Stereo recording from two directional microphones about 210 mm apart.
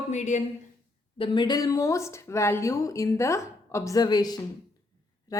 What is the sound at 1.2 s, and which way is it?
A woman's voice, 20° left (ahead or behind).